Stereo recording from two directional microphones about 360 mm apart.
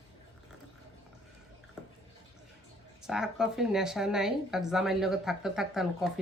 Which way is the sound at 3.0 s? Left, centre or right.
Centre.